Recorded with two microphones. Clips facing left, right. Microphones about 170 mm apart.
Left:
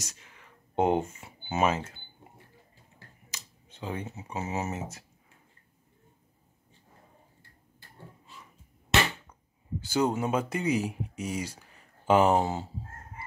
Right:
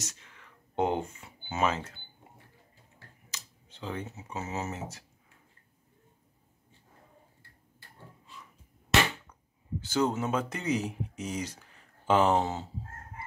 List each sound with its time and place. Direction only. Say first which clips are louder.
0.0 s speech: right 2 dB; 15° left (ahead or behind)
3.8 s speech: left 1 dB; 15° left (ahead or behind)
9.8 s speech: left 1 dB; 10° left (ahead or behind)